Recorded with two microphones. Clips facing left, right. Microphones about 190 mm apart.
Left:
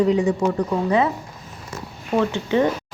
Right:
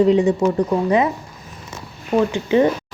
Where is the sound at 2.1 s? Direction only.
15° right (ahead or behind).